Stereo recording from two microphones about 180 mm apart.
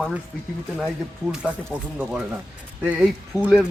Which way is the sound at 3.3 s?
5° right (ahead or behind).